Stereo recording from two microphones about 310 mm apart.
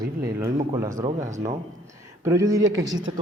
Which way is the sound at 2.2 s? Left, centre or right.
Centre.